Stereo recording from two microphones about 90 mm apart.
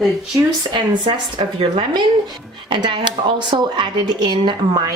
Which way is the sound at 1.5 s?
80° right.